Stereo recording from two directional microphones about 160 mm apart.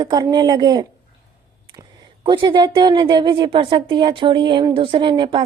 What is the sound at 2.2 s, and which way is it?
A woman's voice, 30° right (ahead or behind).